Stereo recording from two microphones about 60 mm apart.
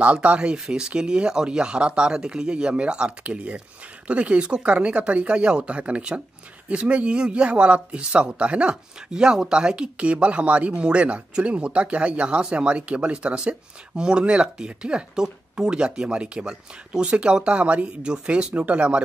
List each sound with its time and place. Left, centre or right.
0.0 s speech: right